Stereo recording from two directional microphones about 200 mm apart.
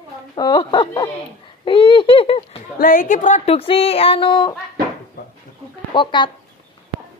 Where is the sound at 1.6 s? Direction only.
25° left (ahead or behind).